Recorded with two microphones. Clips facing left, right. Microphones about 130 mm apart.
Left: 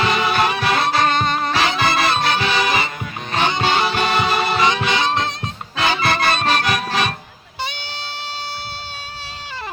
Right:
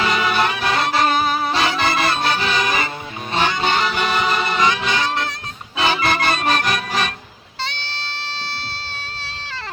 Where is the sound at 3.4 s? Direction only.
15° left (ahead or behind).